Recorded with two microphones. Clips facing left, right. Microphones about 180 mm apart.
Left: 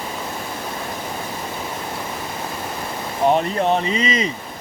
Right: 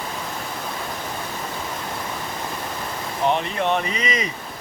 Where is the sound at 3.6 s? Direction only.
35° left (ahead or behind).